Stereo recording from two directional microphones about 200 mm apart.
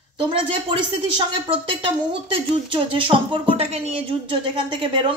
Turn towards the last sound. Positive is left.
turn(degrees=-25)  # may be behind; listen again after turning